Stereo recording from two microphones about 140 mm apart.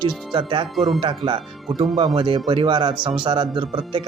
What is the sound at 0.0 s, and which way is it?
Speech, 35° right (ahead or behind).